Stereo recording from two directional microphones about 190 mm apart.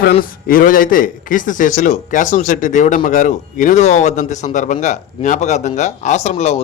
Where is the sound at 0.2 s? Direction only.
50° left (ahead or behind).